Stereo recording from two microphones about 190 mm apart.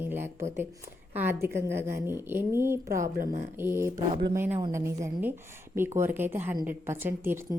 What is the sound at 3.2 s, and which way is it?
Speech, 40° right (ahead or behind).